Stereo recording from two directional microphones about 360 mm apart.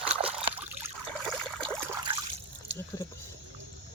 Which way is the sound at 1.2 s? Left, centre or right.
Centre.